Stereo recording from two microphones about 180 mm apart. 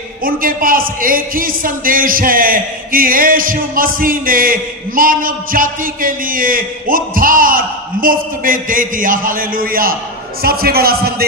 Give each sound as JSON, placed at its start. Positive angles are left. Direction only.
{"t": 0.3, "sound": "a man's voice", "side_deg": -50}